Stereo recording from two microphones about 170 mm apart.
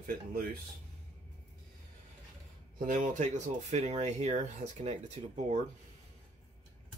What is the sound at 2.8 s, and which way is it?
Speech, 50° right (ahead or behind).